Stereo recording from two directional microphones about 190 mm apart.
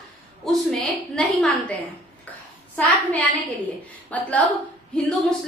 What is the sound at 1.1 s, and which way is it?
Speech, centre (ahead or behind).